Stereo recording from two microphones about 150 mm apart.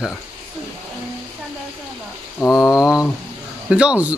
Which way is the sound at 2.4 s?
25° left (ahead or behind).